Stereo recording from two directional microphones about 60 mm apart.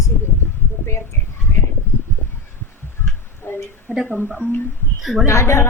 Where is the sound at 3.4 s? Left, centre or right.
Left.